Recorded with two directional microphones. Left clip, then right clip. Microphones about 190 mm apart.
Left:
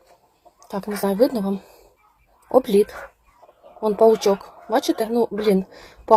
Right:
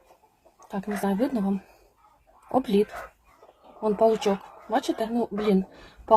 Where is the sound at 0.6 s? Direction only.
30° left (ahead or behind).